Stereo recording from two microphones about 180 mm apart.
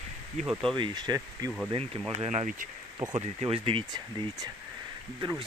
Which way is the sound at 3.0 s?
25° right (ahead or behind).